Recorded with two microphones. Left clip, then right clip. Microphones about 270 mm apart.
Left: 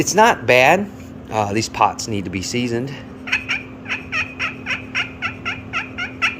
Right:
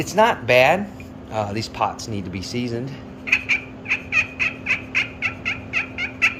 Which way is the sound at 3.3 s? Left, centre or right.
Centre.